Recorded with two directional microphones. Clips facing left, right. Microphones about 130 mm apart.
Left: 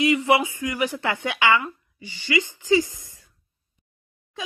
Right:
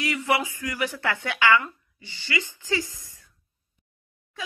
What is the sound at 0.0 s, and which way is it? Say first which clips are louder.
Speech: left 6 dB; 20° left (ahead or behind).